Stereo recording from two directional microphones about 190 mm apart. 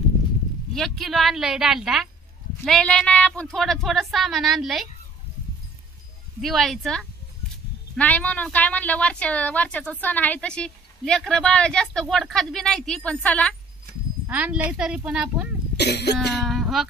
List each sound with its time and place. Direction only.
0.7 s speech: centre (ahead or behind)
6.4 s speech: centre (ahead or behind)
14.2 s speech: 10° right (ahead or behind)
15.8 s cough: 60° left (ahead or behind)
16.3 s speech: centre (ahead or behind)